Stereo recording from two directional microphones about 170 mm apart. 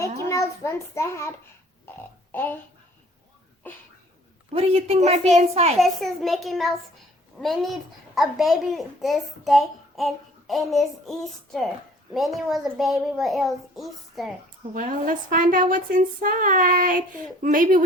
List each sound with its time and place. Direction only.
0.3 s a child's voice: 15° left (ahead or behind)
2.3 s a child's voice: 10° left (ahead or behind)
3.6 s a child's voice: 10° left (ahead or behind)
4.5 s a woman's voice: 35° right (ahead or behind)
5.8 s a child's voice: centre (ahead or behind)
14.7 s a woman's voice: 50° right (ahead or behind)